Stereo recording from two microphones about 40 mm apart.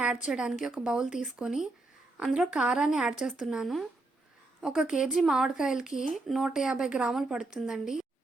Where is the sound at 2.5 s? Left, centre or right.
Right.